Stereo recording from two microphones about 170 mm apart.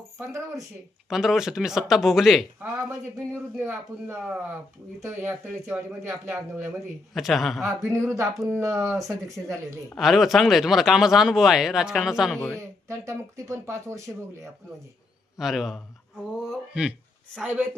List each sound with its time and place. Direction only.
0.2 s speech: 20° right (ahead or behind)
1.1 s speech: centre (ahead or behind)
8.0 s speech: 15° right (ahead or behind)
10.0 s speech: centre (ahead or behind)
12.5 s speech: 20° right (ahead or behind)
15.4 s speech: centre (ahead or behind)